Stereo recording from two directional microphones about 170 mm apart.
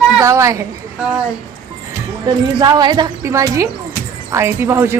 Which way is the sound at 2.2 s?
25° right (ahead or behind).